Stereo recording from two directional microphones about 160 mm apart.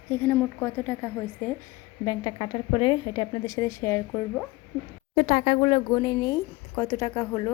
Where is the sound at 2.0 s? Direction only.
25° left (ahead or behind).